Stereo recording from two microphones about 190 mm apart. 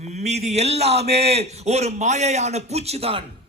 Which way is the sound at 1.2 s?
35° right (ahead or behind).